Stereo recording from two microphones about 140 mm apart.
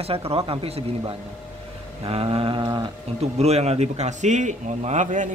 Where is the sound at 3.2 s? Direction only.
50° right (ahead or behind).